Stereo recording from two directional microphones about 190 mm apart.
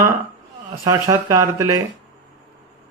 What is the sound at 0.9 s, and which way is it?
Speech, 20° right (ahead or behind).